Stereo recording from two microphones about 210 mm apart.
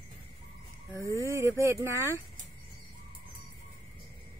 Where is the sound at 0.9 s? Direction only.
10° left (ahead or behind).